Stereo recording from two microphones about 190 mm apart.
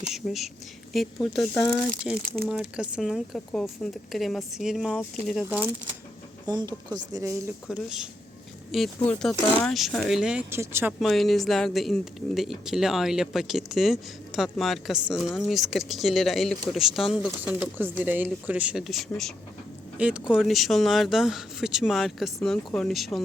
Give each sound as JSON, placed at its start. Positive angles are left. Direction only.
{"t": 0.1, "sound": "speech", "side_deg": 0}
{"t": 6.5, "sound": "speech", "side_deg": -20}
{"t": 7.7, "sound": "speech", "side_deg": 0}
{"t": 11.0, "sound": "speech", "side_deg": 0}